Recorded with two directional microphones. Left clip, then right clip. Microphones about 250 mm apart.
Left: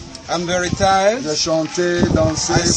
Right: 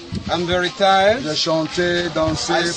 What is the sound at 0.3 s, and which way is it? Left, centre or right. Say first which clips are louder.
Speech: even; left.